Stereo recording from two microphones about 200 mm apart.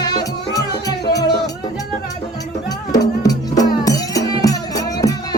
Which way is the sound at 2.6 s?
20° left (ahead or behind).